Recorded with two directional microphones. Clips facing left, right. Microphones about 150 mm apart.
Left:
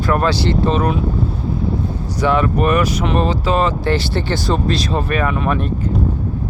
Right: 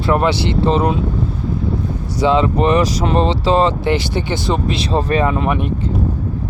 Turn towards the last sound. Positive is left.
turn(degrees=-15)  # may be behind; listen again after turning